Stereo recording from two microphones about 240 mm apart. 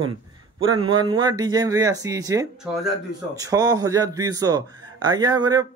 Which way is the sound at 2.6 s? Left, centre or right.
Centre.